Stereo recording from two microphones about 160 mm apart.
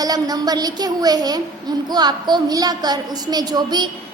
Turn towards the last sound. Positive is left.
turn(degrees=-25)  # may be behind; listen again after turning